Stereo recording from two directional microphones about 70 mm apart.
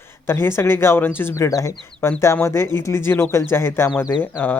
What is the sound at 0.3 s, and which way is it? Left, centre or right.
Speech, left.